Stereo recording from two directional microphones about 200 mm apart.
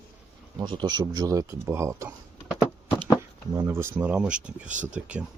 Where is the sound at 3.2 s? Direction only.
10° right (ahead or behind).